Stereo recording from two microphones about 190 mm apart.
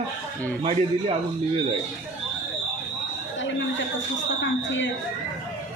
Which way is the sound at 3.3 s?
80° left.